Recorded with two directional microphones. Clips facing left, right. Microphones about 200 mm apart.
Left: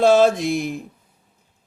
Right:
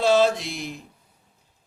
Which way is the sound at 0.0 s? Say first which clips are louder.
Left 5 dB; 50° left (ahead or behind).